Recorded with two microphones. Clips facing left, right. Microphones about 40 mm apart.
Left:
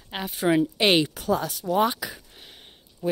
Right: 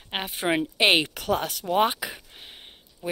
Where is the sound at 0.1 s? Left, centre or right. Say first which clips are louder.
Left 3 dB; right.